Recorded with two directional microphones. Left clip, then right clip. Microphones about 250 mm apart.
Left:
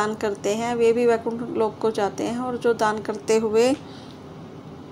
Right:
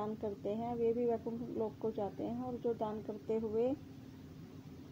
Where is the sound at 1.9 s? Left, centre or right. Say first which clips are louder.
Left 16 dB; left.